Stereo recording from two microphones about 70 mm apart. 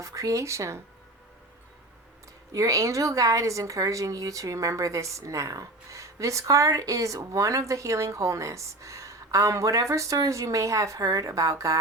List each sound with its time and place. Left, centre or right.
0.0 s a woman's voice: right
2.5 s a woman's voice: right